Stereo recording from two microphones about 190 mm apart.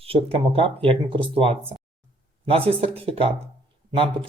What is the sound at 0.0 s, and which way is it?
Speech, 30° right (ahead or behind).